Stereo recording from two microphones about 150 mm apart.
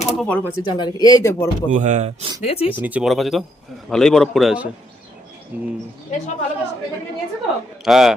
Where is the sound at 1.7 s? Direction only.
55° right (ahead or behind).